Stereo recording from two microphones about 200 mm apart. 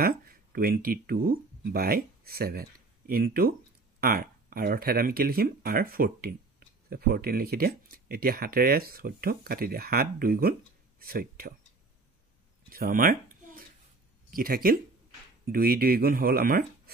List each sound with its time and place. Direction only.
0.0 s speech: 45° right (ahead or behind)
12.6 s a sound: 45° right (ahead or behind)
14.3 s speech: 45° right (ahead or behind)